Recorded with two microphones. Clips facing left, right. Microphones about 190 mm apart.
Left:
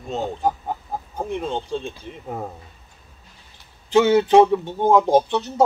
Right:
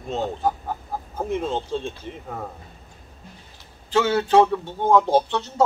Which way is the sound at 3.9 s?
15° left (ahead or behind).